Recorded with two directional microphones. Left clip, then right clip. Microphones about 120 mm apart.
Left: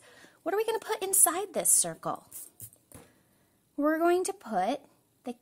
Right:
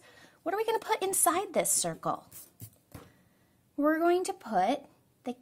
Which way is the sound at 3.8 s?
25° left (ahead or behind).